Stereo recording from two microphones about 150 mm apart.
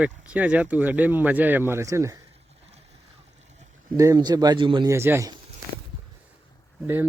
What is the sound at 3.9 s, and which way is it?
Speech, 20° right (ahead or behind).